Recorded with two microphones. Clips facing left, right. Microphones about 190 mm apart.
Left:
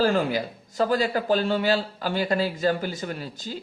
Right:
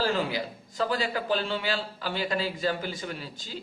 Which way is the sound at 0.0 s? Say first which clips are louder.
Left 5 dB; 50° left (ahead or behind).